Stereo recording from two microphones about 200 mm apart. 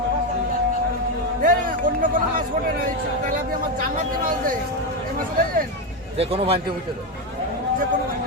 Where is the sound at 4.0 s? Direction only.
45° right (ahead or behind).